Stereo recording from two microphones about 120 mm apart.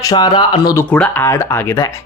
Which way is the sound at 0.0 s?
35° left (ahead or behind).